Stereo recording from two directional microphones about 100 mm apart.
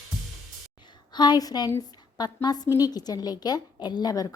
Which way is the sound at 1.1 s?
45° left (ahead or behind).